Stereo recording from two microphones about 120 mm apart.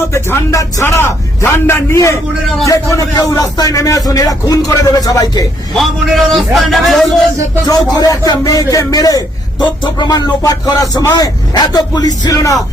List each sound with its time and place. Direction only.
0.1 s speech: 25° left (ahead or behind)
5.7 s a man's voice: centre (ahead or behind)
7.9 s a man's voice: 30° left (ahead or behind)